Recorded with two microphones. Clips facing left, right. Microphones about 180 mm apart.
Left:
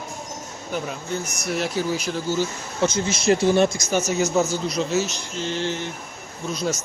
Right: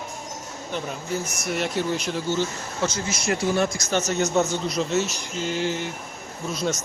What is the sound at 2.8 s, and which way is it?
Speech, 20° left (ahead or behind).